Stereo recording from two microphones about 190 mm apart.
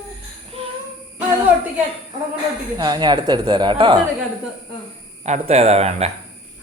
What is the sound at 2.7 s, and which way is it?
A woman's voice, 20° right (ahead or behind).